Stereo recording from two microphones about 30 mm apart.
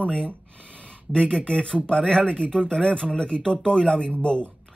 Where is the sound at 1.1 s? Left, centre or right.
Left.